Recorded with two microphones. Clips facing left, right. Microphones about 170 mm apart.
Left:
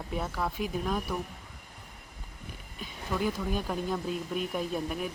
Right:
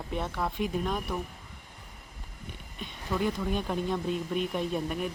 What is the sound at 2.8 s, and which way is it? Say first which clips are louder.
Speech: right 1 dB; 5° left (ahead or behind).